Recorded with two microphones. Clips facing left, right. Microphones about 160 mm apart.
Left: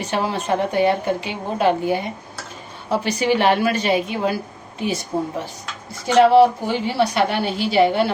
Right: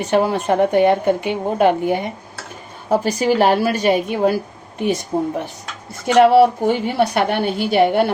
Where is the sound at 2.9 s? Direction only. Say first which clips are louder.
Right 3 dB; 40° right (ahead or behind).